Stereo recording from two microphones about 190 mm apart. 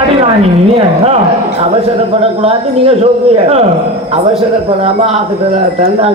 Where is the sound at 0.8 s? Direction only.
30° right (ahead or behind).